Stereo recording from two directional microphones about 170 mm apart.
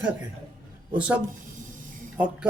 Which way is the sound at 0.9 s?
5° right (ahead or behind).